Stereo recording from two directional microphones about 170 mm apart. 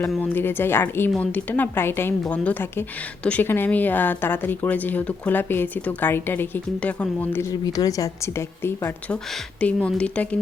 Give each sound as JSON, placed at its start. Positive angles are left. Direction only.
{"t": 0.1, "sound": "speech", "side_deg": 10}
{"t": 7.5, "sound": "speech", "side_deg": 25}